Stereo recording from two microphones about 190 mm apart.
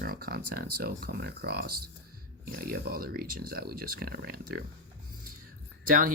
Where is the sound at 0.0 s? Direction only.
50° right (ahead or behind).